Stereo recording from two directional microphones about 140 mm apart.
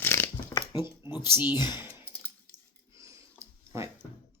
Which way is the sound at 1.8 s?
15° right (ahead or behind).